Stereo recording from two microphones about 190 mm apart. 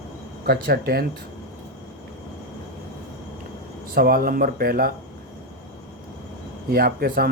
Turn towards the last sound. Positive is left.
turn(degrees=-50)  # may be behind; listen again after turning